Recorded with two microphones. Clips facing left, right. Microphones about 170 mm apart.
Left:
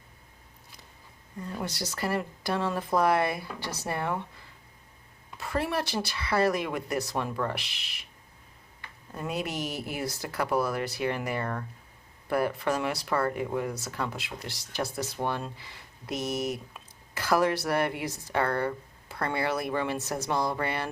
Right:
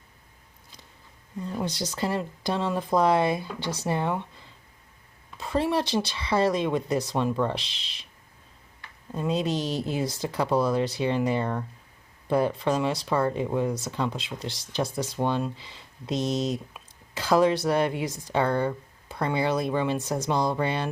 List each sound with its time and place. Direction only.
1.4 s speech: 20° right (ahead or behind)
5.4 s speech: 20° right (ahead or behind)
9.1 s speech: 20° right (ahead or behind)